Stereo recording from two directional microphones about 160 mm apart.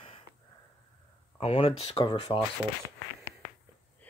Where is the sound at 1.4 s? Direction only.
35° left (ahead or behind).